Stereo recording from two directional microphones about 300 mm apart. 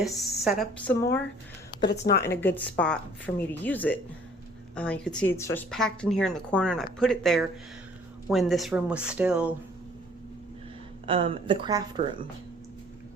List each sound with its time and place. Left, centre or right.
0.0 s speech: centre
1.9 s speech: left
2.4 s speech: centre
11.0 s speech: centre